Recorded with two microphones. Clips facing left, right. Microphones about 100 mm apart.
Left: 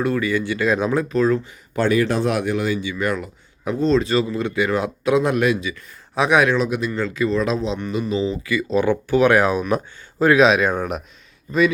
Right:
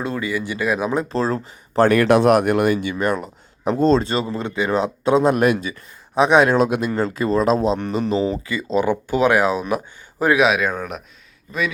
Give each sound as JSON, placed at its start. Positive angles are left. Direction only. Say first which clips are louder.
{"t": 0.0, "sound": "speech", "louder": "left 3 dB", "side_deg": -20}
{"t": 1.0, "sound": "speech", "louder": "left 3 dB", "side_deg": -30}
{"t": 1.9, "sound": "speech", "louder": "right 3 dB", "side_deg": -70}
{"t": 2.3, "sound": "speech", "louder": "right 5 dB", "side_deg": -60}
{"t": 3.0, "sound": "speech", "louder": "right 2 dB", "side_deg": -40}
{"t": 5.4, "sound": "speech", "louder": "right 2 dB", "side_deg": -45}
{"t": 6.1, "sound": "speech", "louder": "right 3 dB", "side_deg": -25}
{"t": 6.5, "sound": "speech", "louder": "right 3 dB", "side_deg": -55}
{"t": 6.9, "sound": "speech", "louder": "right 1 dB", "side_deg": -40}
{"t": 8.4, "sound": "speech", "louder": "left 1 dB", "side_deg": -25}
{"t": 10.7, "sound": "speech", "louder": "left 3 dB", "side_deg": 5}